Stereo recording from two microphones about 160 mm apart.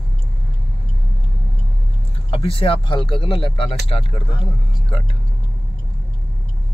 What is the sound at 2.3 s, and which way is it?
Speech, 35° left (ahead or behind).